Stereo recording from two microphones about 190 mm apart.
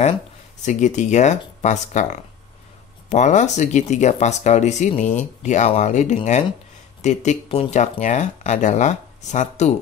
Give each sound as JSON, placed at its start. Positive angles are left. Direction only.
{"t": 0.6, "sound": "speech", "side_deg": 40}